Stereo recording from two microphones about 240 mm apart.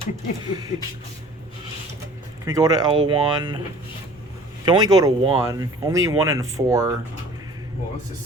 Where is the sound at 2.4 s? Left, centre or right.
Centre.